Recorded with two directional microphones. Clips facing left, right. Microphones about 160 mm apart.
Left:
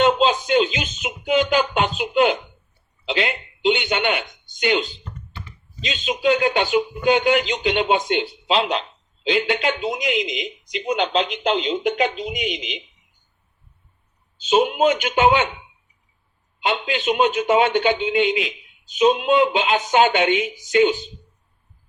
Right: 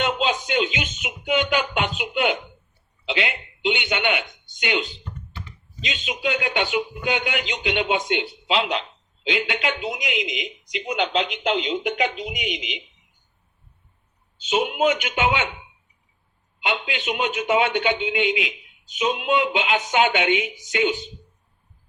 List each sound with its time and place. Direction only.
0.0 s a sound: 35° left (ahead or behind)
4.6 s speech: 40° left (ahead or behind)
14.4 s speech: 35° left (ahead or behind)
16.6 s speech: 35° left (ahead or behind)